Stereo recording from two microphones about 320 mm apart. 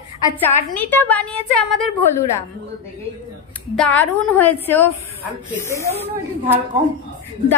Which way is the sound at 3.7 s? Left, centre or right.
Centre.